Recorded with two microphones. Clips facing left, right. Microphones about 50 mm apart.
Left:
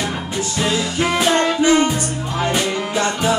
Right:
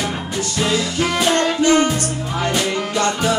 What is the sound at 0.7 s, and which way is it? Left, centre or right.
Music, centre.